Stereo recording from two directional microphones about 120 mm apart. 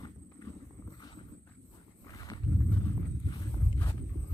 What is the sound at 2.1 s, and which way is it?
Walk, 30° left (ahead or behind).